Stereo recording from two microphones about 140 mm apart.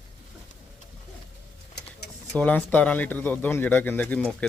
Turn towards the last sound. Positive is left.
turn(degrees=10)  # may be behind; listen again after turning